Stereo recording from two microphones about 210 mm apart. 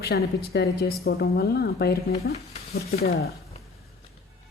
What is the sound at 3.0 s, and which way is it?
Speech, 45° left (ahead or behind).